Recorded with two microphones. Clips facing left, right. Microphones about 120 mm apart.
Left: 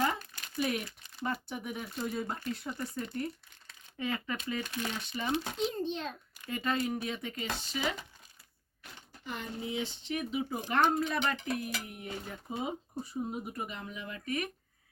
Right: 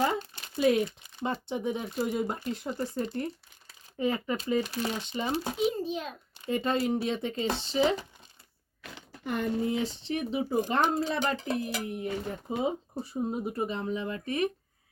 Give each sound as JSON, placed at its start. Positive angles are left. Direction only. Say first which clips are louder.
{"t": 0.0, "sound": "speech", "louder": "right 4 dB", "side_deg": -30}
{"t": 5.7, "sound": "a child's voice", "louder": "right 2 dB", "side_deg": -5}
{"t": 6.3, "sound": "speech", "louder": "right 6 dB", "side_deg": -25}
{"t": 9.2, "sound": "speech", "louder": "right 10 dB", "side_deg": -55}